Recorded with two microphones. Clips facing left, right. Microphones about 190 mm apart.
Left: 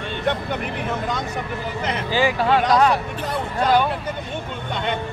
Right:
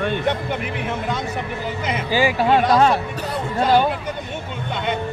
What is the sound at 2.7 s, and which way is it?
Speech, 30° right (ahead or behind).